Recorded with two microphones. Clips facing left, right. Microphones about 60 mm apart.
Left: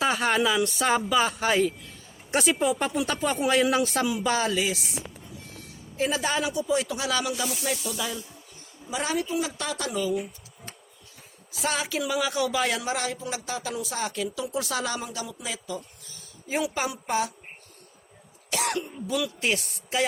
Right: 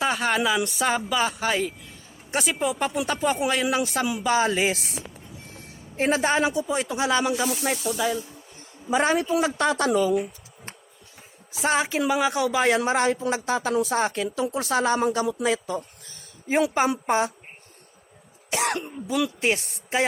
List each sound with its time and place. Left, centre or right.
0.0 s speech: centre
4.4 s a woman's voice: right
5.5 s a man's voice: right
8.9 s a woman's voice: right
11.5 s a man's voice: right
15.0 s speech: right
18.5 s a woman's voice: right